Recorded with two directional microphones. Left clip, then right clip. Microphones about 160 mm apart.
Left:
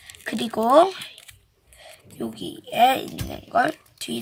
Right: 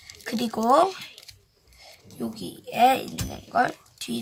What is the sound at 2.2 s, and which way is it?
Speech, 15° left (ahead or behind).